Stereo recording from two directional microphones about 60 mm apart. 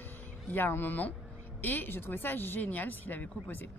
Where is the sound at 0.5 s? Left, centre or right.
Left.